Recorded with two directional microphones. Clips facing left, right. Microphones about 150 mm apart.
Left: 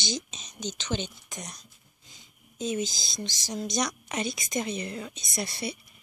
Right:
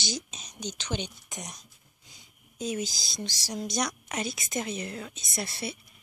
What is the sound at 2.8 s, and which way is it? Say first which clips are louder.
Speech: left 1 dB; 10° right (ahead or behind).